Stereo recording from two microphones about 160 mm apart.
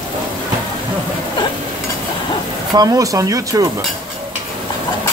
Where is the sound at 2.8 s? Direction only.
20° right (ahead or behind).